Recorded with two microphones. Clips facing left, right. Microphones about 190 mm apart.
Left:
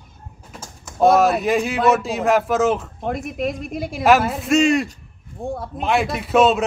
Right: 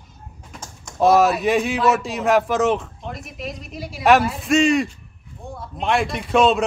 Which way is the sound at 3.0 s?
55° left (ahead or behind).